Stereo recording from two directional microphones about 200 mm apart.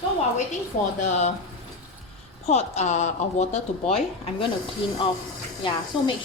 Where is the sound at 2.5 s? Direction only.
35° left (ahead or behind).